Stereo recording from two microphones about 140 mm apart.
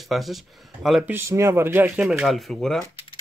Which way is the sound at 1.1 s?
20° right (ahead or behind).